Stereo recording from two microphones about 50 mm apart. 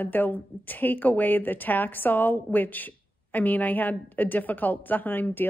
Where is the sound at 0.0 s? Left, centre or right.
Left.